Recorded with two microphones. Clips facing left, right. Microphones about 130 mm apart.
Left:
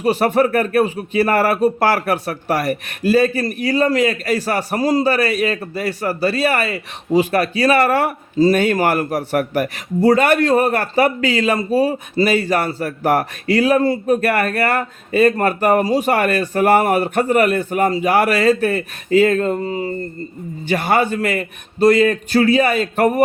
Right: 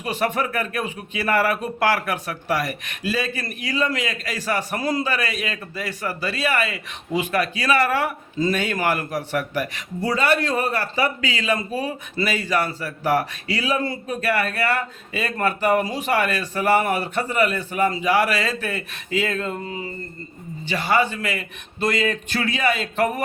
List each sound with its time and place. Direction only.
0.0 s speech: 40° left (ahead or behind)
4.8 s a man's voice: 30° left (ahead or behind)
5.1 s speech: 45° left (ahead or behind)
20.7 s speech: 50° left (ahead or behind)